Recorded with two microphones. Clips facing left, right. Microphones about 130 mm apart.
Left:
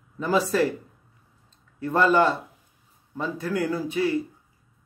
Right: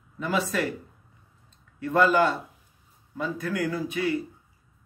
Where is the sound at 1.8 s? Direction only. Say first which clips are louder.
Left 1 dB; 30° left (ahead or behind).